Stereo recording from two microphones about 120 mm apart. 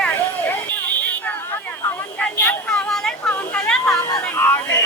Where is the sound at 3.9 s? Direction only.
30° left (ahead or behind).